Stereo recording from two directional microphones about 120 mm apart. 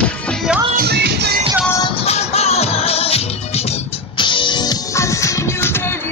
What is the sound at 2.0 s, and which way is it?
Music, 60° left (ahead or behind).